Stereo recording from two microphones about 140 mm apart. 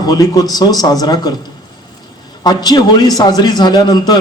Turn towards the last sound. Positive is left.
turn(degrees=30)  # may be behind; listen again after turning